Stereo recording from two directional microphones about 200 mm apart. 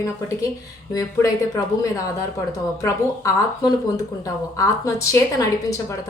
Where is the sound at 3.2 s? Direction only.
15° left (ahead or behind).